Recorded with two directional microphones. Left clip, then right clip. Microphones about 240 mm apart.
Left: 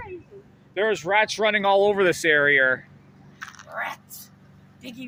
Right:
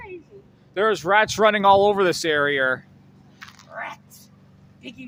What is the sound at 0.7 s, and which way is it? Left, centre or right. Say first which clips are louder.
Speech: right 3 dB; right.